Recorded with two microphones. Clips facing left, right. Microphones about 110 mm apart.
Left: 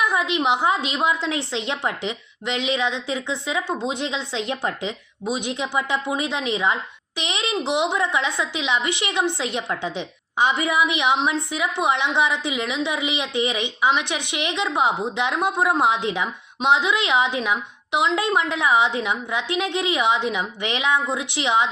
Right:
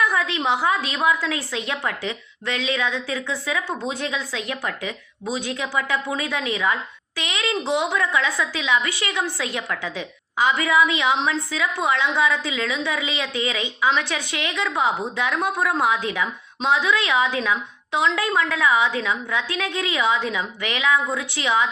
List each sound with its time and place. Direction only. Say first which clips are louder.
0.0 s a woman's voice: left 1 dB; 20° left (ahead or behind)